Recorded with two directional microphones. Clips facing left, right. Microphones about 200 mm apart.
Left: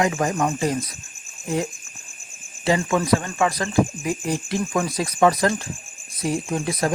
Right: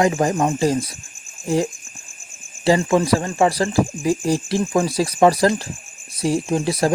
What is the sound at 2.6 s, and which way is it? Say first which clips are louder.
Speech: right 4 dB; 30° right (ahead or behind).